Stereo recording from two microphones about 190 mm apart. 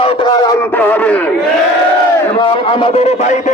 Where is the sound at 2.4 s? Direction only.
25° left (ahead or behind).